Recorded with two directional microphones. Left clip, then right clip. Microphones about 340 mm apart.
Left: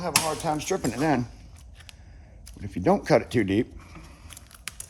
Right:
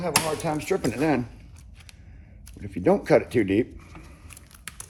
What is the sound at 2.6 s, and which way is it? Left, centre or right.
Speech, left.